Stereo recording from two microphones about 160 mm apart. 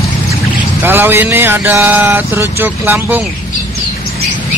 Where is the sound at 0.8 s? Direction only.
15° right (ahead or behind).